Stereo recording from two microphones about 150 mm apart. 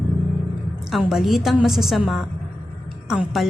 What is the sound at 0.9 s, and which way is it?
Speech, centre (ahead or behind).